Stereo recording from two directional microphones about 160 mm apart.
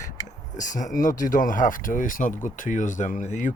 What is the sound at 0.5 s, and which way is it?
Speech, 50° left (ahead or behind).